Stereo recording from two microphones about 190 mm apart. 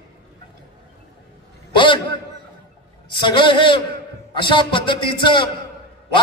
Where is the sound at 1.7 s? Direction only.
25° left (ahead or behind).